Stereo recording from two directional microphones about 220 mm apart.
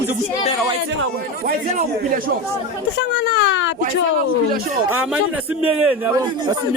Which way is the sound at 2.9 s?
50° left (ahead or behind).